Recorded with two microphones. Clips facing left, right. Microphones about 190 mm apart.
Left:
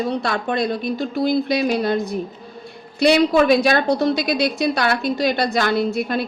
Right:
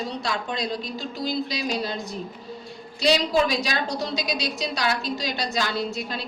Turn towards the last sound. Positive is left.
turn(degrees=55)  # may be behind; listen again after turning